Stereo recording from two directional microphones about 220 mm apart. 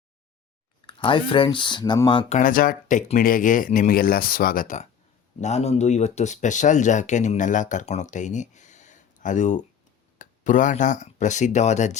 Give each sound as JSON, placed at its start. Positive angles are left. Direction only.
{"t": 0.9, "sound": "speech", "side_deg": 20}
{"t": 2.4, "sound": "speech", "side_deg": 40}